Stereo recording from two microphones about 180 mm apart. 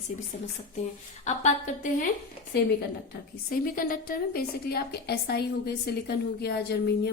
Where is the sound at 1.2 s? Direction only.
40° left (ahead or behind).